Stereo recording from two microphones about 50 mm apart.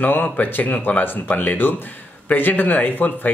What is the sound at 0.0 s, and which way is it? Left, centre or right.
Speech, left.